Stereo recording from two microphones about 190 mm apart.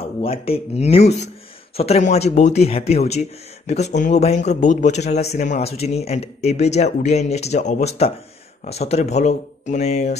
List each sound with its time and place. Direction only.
0.0 s speech: 30° left (ahead or behind)